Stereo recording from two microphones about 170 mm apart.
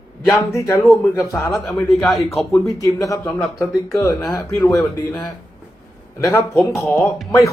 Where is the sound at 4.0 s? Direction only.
20° left (ahead or behind).